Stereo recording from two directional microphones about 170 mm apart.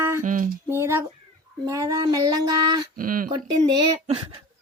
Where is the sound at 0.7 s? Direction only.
15° right (ahead or behind).